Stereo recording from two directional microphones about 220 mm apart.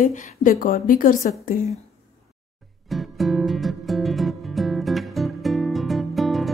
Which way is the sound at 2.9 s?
Centre (ahead or behind).